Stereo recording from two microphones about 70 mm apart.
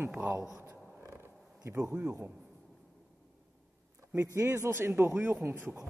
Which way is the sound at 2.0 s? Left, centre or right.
Right.